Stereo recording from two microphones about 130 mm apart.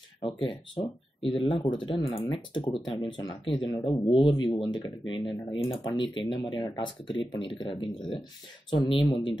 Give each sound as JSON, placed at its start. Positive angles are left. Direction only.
{"t": 0.2, "sound": "speech", "side_deg": 40}